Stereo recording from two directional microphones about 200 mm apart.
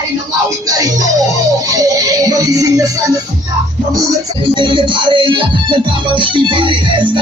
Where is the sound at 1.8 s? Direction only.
15° right (ahead or behind).